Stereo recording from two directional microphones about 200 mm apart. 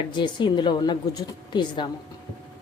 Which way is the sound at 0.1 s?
25° left (ahead or behind).